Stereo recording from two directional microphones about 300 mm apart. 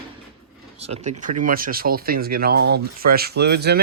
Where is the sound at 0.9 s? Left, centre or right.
Right.